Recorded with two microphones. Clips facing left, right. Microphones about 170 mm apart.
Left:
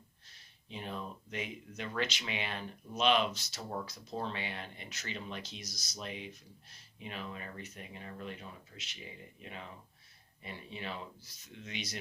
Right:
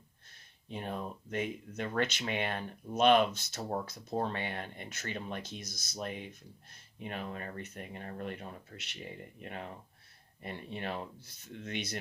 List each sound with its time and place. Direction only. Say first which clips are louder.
0.3 s speech: right 5 dB; 50° right (ahead or behind)